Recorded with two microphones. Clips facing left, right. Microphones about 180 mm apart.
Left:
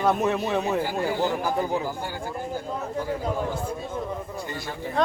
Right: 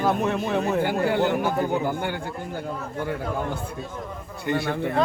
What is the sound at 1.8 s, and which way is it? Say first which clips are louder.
A man's voice: right 4 dB; 65° right (ahead or behind).